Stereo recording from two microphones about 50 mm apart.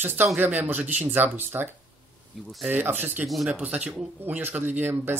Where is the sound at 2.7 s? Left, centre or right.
Right.